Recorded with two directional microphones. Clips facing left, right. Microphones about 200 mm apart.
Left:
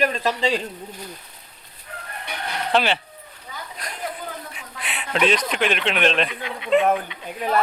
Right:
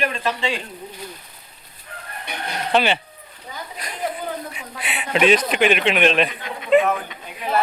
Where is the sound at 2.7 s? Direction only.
Centre (ahead or behind).